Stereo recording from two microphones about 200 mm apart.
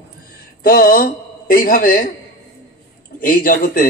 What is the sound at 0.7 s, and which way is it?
A man's voice, 45° left (ahead or behind).